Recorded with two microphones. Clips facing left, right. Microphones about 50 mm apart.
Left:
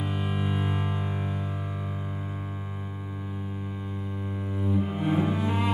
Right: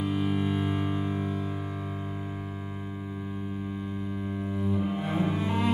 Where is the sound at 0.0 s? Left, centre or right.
Centre.